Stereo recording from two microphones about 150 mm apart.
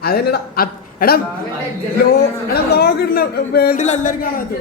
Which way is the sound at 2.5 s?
90° left.